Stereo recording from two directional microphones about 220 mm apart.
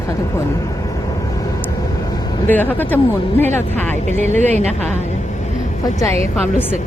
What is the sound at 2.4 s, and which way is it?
Speech, 10° left (ahead or behind).